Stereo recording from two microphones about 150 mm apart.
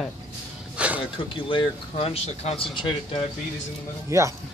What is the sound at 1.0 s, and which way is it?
Speech, 35° left (ahead or behind).